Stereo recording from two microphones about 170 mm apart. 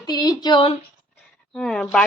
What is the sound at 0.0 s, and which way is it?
Speech, 25° left (ahead or behind).